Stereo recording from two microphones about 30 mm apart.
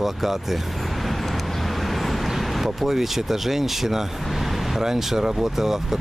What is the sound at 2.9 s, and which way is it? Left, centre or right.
Speech, centre.